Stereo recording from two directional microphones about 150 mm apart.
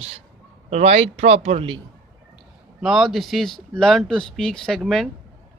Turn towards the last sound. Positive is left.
turn(degrees=0)  # may be behind; listen again after turning